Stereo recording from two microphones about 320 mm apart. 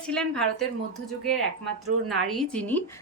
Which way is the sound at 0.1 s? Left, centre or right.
Centre.